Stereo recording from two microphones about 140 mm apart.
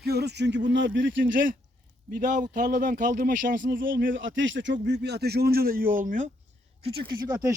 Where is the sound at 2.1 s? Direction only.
65° right (ahead or behind); by 4.2 s 85° right.